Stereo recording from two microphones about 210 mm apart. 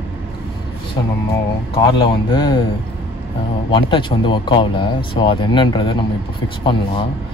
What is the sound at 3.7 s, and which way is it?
Speech, 25° left (ahead or behind).